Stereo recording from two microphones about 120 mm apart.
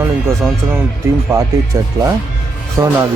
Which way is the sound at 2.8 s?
25° right (ahead or behind).